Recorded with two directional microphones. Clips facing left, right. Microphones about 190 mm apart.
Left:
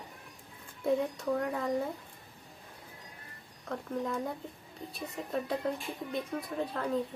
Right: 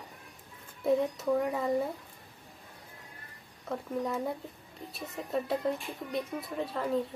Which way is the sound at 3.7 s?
5° right (ahead or behind).